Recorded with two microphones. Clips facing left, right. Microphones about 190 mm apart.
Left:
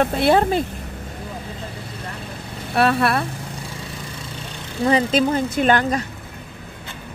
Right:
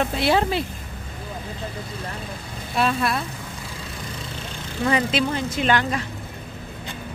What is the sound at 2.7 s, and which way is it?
Speech, 65° left (ahead or behind).